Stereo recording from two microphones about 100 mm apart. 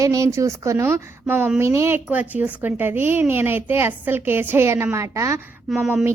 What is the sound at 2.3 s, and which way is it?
A woman's voice, 15° right (ahead or behind).